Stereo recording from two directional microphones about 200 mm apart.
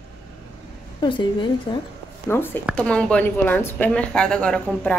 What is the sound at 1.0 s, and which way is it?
Speech, 25° left (ahead or behind).